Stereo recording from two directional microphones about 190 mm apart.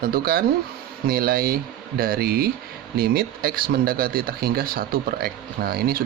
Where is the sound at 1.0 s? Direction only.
50° right (ahead or behind).